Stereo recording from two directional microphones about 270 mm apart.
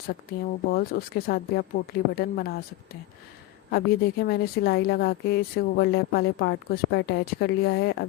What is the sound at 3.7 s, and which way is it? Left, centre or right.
Speech, left.